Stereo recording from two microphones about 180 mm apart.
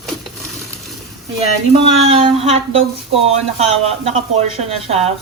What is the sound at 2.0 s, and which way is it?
Speech, 35° right (ahead or behind).